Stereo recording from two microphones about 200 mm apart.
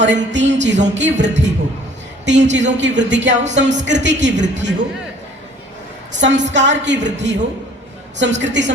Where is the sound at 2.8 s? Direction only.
65° right (ahead or behind).